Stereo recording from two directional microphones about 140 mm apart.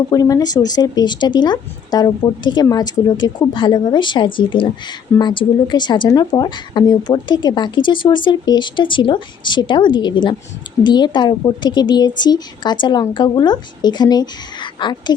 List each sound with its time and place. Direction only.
0.1 s speech: 25° left (ahead or behind)